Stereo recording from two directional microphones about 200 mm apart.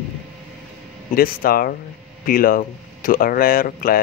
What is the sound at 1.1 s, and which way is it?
Speech, 45° left (ahead or behind).